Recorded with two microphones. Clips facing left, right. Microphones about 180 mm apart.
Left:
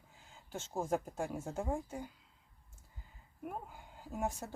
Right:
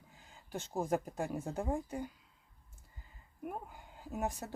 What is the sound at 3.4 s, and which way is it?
Speech, centre (ahead or behind).